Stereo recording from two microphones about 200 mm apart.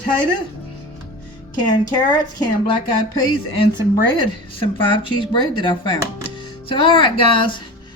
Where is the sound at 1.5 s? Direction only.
20° left (ahead or behind).